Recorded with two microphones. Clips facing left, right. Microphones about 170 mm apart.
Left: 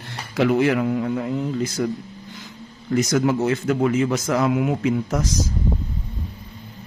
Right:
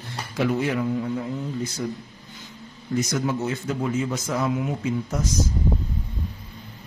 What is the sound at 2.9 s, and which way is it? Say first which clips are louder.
A man's voice: left 5 dB; 90° left.